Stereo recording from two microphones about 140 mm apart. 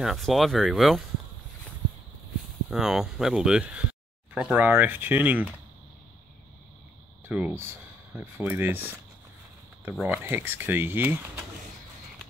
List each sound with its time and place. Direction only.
0.0 s speech: centre (ahead or behind)
2.7 s speech: 5° right (ahead or behind)
7.2 s speech: 10° right (ahead or behind)
10.0 s speech: 15° right (ahead or behind)